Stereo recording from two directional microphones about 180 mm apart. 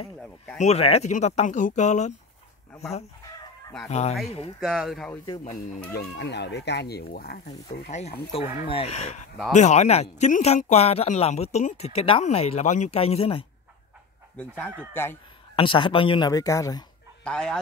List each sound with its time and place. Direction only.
0.6 s speech: 35° left (ahead or behind)
3.9 s speech: 40° left (ahead or behind)
4.6 s speech: centre (ahead or behind)
5.4 s speech: 45° left (ahead or behind)
5.9 s speech: 70° left (ahead or behind)
7.7 s speech: 50° left (ahead or behind)
8.3 s speech: 30° left (ahead or behind)
14.3 s speech: 5° left (ahead or behind)
15.5 s speech: 30° left (ahead or behind)
17.2 s speech: 5° left (ahead or behind)